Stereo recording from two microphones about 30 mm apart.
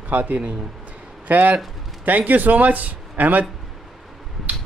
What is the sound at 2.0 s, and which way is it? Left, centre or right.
A man's voice, right.